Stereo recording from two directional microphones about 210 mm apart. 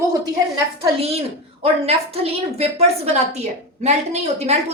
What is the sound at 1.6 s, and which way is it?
A woman's voice, 30° right (ahead or behind).